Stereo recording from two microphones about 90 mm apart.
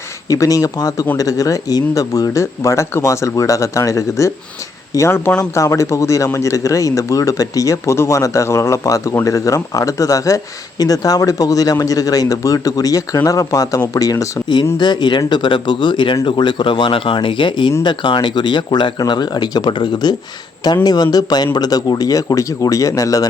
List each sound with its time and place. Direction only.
0.3 s speech: 40° left (ahead or behind)
14.8 s speech: 55° left (ahead or behind); by 23.3 s 40° left (ahead or behind)